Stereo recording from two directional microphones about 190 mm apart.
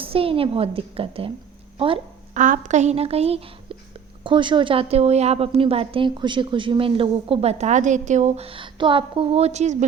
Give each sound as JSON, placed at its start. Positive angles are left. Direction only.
{"t": 0.0, "sound": "a woman's voice", "side_deg": -30}
{"t": 1.8, "sound": "a sound", "side_deg": -30}
{"t": 2.4, "sound": "a woman's voice", "side_deg": -40}